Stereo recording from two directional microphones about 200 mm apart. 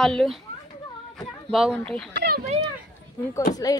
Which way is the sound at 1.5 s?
Centre (ahead or behind).